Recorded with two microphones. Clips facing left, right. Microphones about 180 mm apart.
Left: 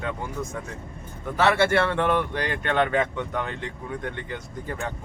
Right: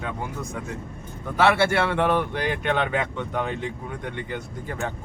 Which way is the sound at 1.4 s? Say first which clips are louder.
Even; 10° right (ahead or behind).